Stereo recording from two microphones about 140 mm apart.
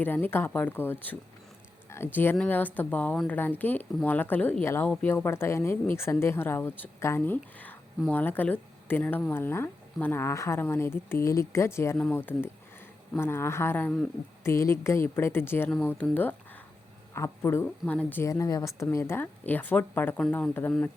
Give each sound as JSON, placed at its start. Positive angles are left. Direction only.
{"t": 0.0, "sound": "speech", "side_deg": 15}